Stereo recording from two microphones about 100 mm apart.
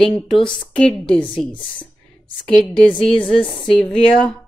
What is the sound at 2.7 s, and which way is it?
Speech, 10° left (ahead or behind).